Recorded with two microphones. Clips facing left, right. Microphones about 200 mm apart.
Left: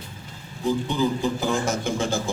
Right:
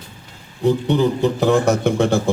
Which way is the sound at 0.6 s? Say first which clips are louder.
Right 7 dB; 65° right (ahead or behind).